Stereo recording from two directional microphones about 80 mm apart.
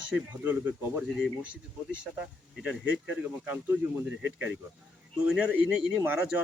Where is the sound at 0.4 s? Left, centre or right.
Right.